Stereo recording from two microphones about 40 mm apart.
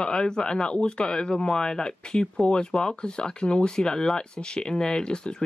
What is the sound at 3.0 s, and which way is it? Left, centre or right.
Speech, left.